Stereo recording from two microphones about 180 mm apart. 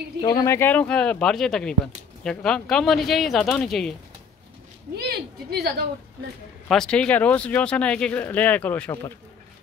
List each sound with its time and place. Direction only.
0.2 s speech: 20° left (ahead or behind); by 3.9 s centre (ahead or behind)
4.9 s a woman's voice: 65° right (ahead or behind)
6.7 s speech: 5° left (ahead or behind)